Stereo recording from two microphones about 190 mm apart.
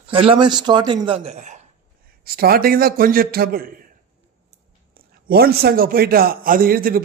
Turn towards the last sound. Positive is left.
turn(degrees=-50)  # may be behind; listen again after turning